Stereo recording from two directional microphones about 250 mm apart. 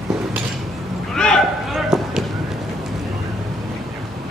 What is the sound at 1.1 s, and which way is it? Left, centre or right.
Basketball bounce, centre.